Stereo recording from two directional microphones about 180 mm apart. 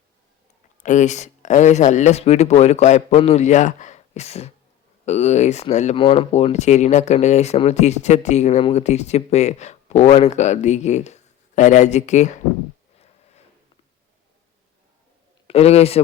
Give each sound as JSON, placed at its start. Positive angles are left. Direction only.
{"t": 0.8, "sound": "speech", "side_deg": 40}
{"t": 15.4, "sound": "a man's voice", "side_deg": 35}